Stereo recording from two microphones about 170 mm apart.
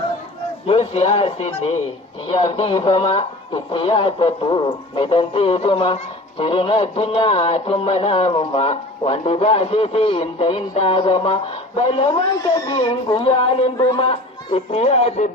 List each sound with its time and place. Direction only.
0.7 s a man's voice: 35° left (ahead or behind)